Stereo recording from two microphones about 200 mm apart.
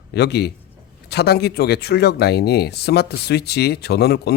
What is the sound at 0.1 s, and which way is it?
A man's voice, 55° left (ahead or behind).